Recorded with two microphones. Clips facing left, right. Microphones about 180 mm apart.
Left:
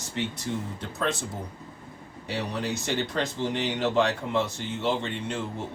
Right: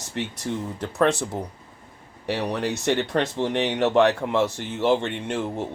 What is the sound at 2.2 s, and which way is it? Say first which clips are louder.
Speech: right 5 dB; 70° right (ahead or behind).